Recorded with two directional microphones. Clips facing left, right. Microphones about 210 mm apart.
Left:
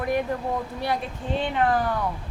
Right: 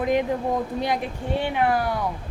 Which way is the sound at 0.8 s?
15° right (ahead or behind).